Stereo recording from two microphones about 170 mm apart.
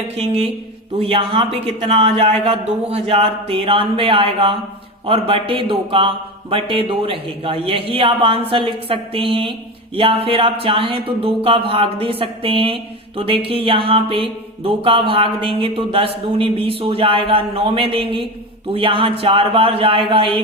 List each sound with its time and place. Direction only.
0.2 s speech: 35° right (ahead or behind)